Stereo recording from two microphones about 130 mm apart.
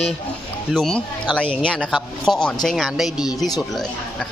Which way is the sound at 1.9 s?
Centre (ahead or behind).